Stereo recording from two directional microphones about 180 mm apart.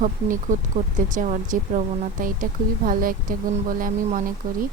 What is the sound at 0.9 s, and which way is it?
A woman's voice, 45° right (ahead or behind).